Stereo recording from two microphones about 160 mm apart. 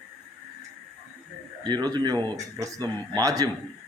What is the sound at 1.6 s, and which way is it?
Speech, 25° right (ahead or behind).